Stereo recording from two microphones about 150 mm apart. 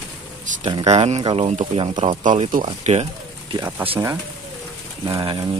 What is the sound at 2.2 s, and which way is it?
Speech, 60° right (ahead or behind).